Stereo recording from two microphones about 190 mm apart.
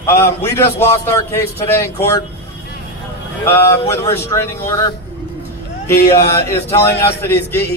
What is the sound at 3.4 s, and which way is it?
A man's voice, 15° left (ahead or behind).